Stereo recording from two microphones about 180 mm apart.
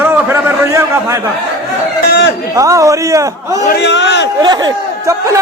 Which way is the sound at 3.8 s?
85° left.